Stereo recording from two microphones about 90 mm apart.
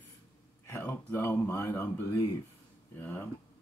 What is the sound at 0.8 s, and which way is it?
Speech, 20° left (ahead or behind).